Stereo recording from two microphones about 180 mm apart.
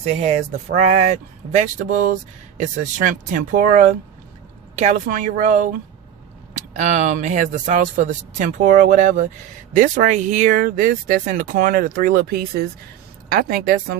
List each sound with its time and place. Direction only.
0.0 s speech: 35° right (ahead or behind)
6.7 s speech: 40° right (ahead or behind)